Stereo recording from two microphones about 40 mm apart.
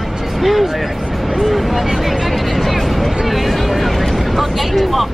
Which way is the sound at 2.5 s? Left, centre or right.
Centre.